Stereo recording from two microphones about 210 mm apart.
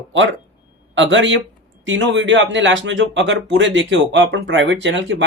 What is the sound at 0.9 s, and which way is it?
Speech, 60° right (ahead or behind).